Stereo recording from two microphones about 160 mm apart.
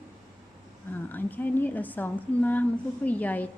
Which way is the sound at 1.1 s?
10° left (ahead or behind).